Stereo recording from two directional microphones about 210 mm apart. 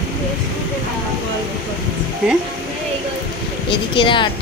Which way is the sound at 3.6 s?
25° left (ahead or behind).